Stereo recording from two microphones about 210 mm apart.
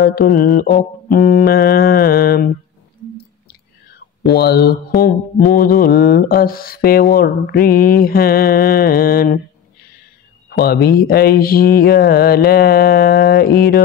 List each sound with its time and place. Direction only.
0.0 s mantra: 45° left (ahead or behind)
4.3 s mantra: 50° left (ahead or behind)
10.5 s mantra: 50° left (ahead or behind)